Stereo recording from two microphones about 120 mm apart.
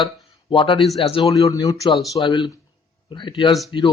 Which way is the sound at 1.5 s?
30° left (ahead or behind).